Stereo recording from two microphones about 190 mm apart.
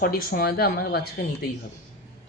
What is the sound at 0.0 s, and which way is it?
Speech, 50° left (ahead or behind).